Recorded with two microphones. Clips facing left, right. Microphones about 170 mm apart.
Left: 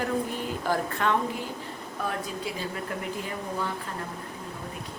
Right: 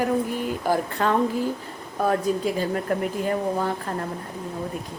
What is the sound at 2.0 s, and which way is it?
Speech, 45° right (ahead or behind).